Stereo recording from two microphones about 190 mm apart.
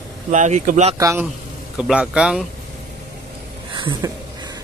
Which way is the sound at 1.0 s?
15° right (ahead or behind).